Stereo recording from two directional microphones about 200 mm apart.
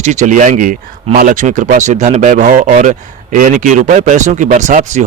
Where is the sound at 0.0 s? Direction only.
35° right (ahead or behind).